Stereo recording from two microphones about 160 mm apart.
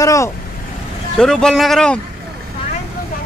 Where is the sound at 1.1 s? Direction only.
5° left (ahead or behind).